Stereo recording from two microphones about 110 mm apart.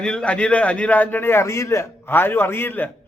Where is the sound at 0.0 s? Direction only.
5° left (ahead or behind).